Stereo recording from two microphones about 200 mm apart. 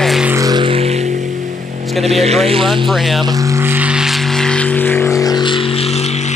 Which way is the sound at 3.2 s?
15° right (ahead or behind).